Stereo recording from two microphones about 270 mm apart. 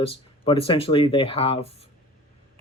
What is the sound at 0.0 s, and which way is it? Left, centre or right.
Speech, left.